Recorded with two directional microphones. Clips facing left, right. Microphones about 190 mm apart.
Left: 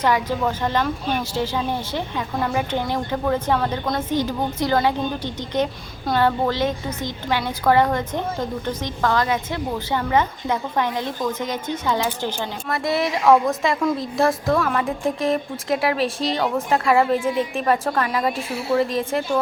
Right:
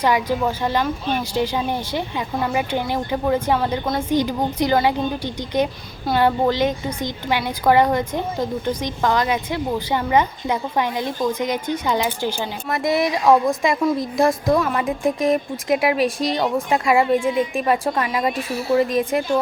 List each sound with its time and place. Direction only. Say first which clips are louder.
0.0 s a woman's voice: right 1 dB; 10° right (ahead or behind)
17.2 s a woman's voice: right 2 dB; centre (ahead or behind)
17.5 s a woman's voice: right 1 dB; 10° right (ahead or behind)